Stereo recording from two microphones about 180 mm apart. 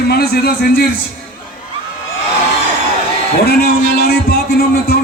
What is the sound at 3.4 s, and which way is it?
Speech, 60° left (ahead or behind).